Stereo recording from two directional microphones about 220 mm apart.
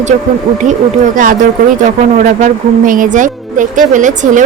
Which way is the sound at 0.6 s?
35° right (ahead or behind).